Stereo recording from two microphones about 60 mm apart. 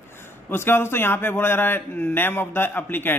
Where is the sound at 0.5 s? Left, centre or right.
Left.